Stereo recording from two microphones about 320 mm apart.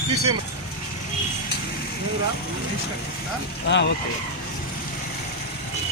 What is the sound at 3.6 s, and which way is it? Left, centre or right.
Speech, left.